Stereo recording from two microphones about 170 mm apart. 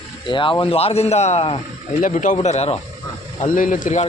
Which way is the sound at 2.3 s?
40° left (ahead or behind).